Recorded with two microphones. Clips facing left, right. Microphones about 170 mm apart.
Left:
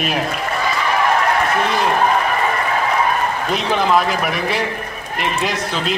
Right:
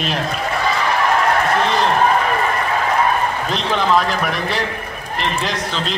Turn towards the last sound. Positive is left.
turn(degrees=5)  # may be behind; listen again after turning